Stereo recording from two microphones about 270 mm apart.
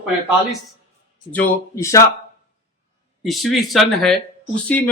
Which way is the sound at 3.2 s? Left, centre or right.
Centre.